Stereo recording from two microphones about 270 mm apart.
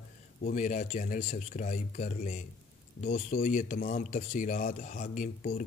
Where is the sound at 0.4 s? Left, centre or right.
Left.